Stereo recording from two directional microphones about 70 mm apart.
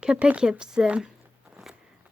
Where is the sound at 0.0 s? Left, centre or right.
Centre.